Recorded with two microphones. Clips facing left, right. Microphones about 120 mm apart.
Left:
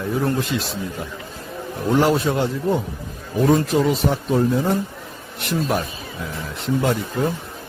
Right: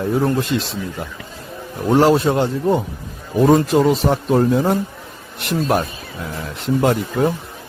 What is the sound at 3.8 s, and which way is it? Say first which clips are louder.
Speech: right 4 dB; 45° right (ahead or behind).